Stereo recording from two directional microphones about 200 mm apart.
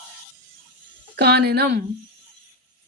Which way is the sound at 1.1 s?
55° right (ahead or behind).